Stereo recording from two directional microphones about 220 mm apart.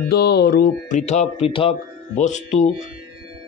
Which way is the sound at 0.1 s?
45° left (ahead or behind).